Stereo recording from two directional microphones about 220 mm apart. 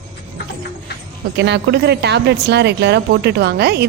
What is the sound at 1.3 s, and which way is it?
Speech, 50° right (ahead or behind).